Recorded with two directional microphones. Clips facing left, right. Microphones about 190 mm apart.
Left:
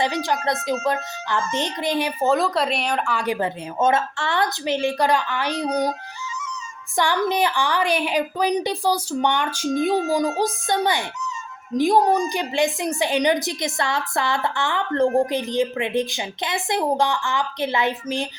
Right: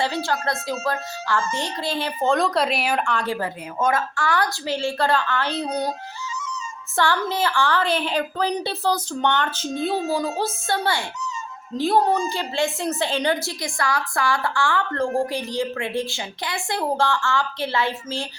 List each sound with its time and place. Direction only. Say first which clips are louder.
0.0 s a woman's voice: left 1 dB; 15° left (ahead or behind); by 3.2 s 5° right (ahead or behind)
3.2 s a woman's voice: left 2 dB; 20° left (ahead or behind)
6.9 s a woman's voice: left 2 dB; 15° left (ahead or behind)